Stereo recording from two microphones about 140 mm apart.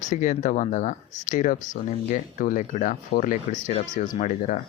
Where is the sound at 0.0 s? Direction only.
60° left (ahead or behind).